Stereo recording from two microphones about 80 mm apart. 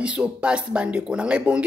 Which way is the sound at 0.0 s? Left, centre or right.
Centre.